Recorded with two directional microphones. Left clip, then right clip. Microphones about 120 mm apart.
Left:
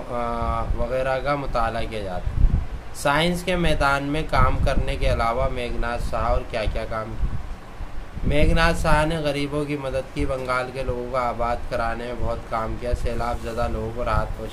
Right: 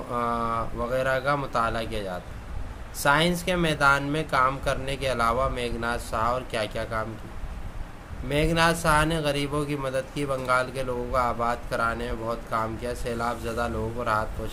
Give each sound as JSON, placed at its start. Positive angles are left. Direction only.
{"t": 0.1, "sound": "a man's voice", "side_deg": -25}
{"t": 8.3, "sound": "a man's voice", "side_deg": -25}